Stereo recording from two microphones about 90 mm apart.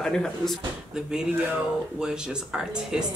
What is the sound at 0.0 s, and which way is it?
Speech, 5° left (ahead or behind).